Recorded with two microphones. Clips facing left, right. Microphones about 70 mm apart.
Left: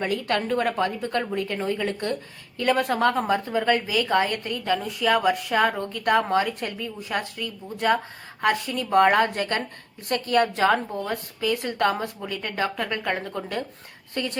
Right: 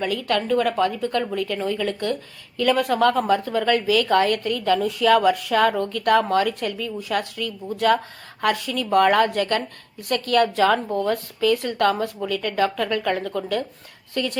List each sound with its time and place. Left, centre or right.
0.0 s a woman's voice: left